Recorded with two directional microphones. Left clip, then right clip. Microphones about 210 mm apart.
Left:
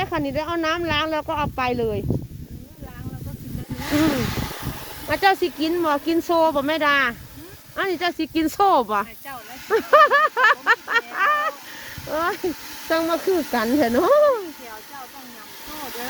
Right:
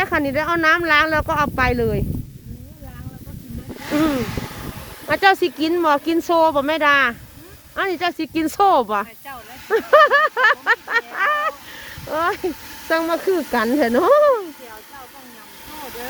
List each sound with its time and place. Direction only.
0.0 s speech: 30° right (ahead or behind)
3.8 s speech: 30° left (ahead or behind)
4.3 s vehicle: 45° left (ahead or behind)
5.0 s speech: 25° right (ahead or behind)
7.8 s a sound: 20° right (ahead or behind)
12.9 s speech: 20° right (ahead or behind)
15.7 s vehicle: 40° left (ahead or behind)